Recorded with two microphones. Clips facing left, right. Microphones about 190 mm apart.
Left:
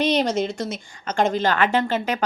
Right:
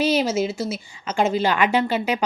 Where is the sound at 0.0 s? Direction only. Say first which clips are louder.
Even; 5° right (ahead or behind).